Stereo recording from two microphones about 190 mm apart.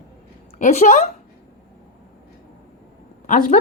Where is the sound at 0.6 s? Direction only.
40° left (ahead or behind).